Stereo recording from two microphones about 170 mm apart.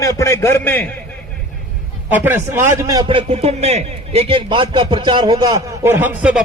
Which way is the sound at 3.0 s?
35° right (ahead or behind).